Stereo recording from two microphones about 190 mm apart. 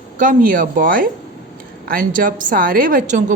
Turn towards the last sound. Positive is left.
turn(degrees=-40)  # may be behind; listen again after turning